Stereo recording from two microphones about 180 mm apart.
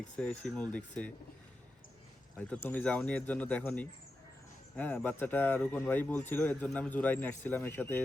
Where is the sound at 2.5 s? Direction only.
10° left (ahead or behind).